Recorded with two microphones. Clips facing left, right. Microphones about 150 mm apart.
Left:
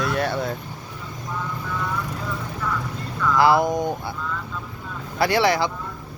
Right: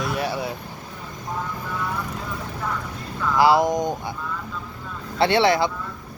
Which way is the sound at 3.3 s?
15° right (ahead or behind).